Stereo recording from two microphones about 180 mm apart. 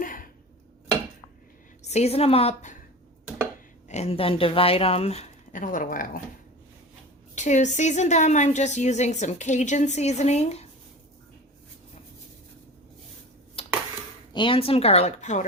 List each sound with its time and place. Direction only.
0.0 s a sound: 50° left (ahead or behind)
1.8 s a woman's voice: 35° left (ahead or behind)
3.8 s a woman's voice: 35° left (ahead or behind)
7.3 s a woman's voice: 40° left (ahead or behind)
13.6 s a sound: 30° left (ahead or behind)
14.3 s a woman's voice: 30° left (ahead or behind)